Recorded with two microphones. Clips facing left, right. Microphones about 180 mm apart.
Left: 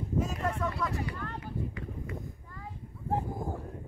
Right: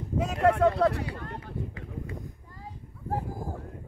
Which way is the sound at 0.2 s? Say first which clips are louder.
Right 11 dB; 70° right (ahead or behind).